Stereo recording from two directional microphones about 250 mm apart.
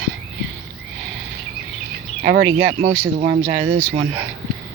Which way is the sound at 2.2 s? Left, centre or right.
Right.